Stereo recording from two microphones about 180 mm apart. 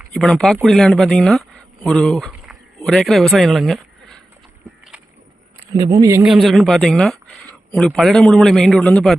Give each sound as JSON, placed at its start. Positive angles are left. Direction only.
{"t": 0.1, "sound": "speech", "side_deg": 0}
{"t": 5.7, "sound": "speech", "side_deg": -20}
{"t": 6.2, "sound": "speech", "side_deg": 0}